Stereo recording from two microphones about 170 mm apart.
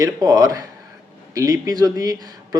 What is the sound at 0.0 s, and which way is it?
Speech, 20° right (ahead or behind).